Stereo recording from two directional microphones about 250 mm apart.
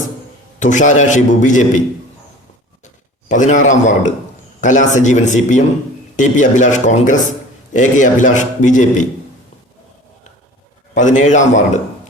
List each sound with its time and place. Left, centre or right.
0.6 s a man's voice: left
2.8 s a man's voice: left
10.9 s a man's voice: left